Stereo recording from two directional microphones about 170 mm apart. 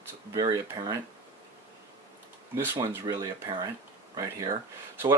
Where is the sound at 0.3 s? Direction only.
20° right (ahead or behind).